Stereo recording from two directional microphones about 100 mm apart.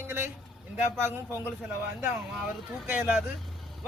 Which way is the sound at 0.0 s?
25° right (ahead or behind).